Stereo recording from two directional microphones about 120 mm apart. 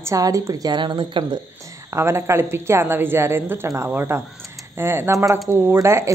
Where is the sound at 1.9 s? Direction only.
20° right (ahead or behind).